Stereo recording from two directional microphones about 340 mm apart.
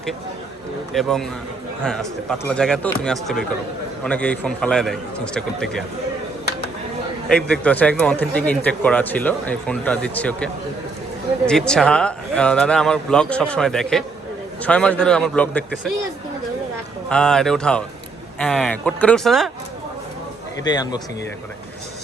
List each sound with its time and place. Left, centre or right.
0.9 s a man's voice: centre
7.3 s a man's voice: centre
17.1 s a man's voice: centre
20.7 s speech: centre